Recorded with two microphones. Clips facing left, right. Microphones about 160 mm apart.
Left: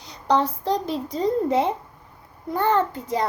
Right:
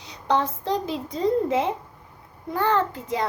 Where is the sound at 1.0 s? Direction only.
40° left (ahead or behind).